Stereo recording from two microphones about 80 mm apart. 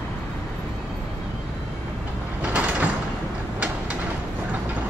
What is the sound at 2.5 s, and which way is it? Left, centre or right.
Sliding door, centre.